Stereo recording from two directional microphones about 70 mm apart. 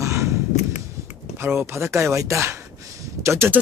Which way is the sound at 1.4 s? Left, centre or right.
Right.